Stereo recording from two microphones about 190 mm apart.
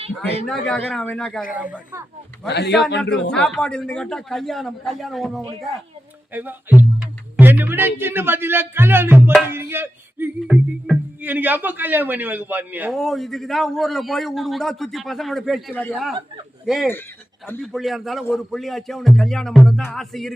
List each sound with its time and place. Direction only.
0.4 s a man's voice: 5° left (ahead or behind)
1.5 s speech: 10° right (ahead or behind)
2.5 s a man's voice: 65° left (ahead or behind)
3.0 s a man's voice: 5° left (ahead or behind)
6.3 s speech: 10° right (ahead or behind)
9.5 s a sound: 10° right (ahead or behind)
10.4 s a man's voice: centre (ahead or behind)